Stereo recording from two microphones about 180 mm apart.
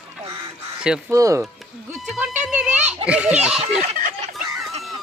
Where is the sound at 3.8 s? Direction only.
50° right (ahead or behind).